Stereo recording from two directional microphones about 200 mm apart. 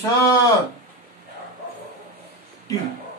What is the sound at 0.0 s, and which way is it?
Speech, 20° left (ahead or behind).